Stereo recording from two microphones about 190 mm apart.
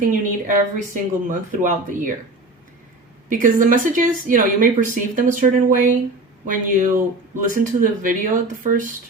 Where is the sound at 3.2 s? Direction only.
45° right (ahead or behind).